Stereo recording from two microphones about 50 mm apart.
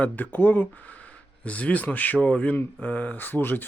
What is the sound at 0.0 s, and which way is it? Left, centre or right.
Speech, left.